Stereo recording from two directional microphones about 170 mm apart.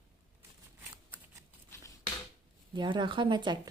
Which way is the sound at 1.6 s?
15° left (ahead or behind).